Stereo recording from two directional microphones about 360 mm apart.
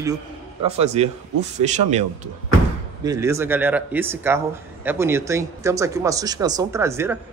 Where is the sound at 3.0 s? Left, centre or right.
Centre.